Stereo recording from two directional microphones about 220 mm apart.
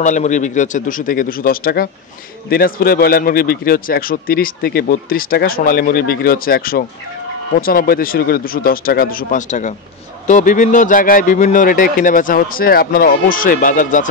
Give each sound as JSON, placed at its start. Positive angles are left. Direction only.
{"t": 0.0, "sound": "a man's voice", "side_deg": 35}